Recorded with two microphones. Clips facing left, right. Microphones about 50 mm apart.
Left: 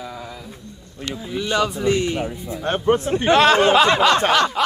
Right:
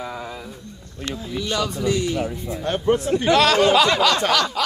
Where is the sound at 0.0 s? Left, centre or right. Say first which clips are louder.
Right 2 dB; right.